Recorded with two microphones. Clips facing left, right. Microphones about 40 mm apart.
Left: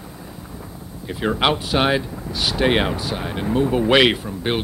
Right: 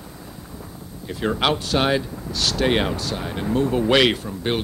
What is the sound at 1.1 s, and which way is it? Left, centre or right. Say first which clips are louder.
Speech: left 2 dB; centre.